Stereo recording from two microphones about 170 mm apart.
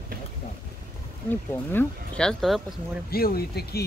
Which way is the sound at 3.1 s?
65° left (ahead or behind).